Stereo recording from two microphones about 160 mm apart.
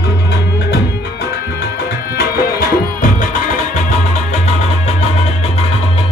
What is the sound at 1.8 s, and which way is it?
Music, 80° left.